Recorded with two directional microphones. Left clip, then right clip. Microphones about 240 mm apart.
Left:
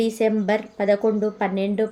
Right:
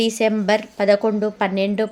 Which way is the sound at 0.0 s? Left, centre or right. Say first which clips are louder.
Right 2 dB; centre.